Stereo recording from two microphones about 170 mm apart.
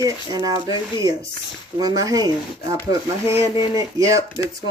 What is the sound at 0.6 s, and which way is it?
Speech, 30° left (ahead or behind).